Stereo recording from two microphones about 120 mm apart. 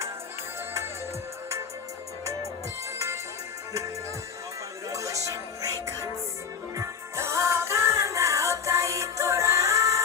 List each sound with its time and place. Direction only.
2.2 s music: 25° right (ahead or behind)
4.9 s music: 25° right (ahead or behind)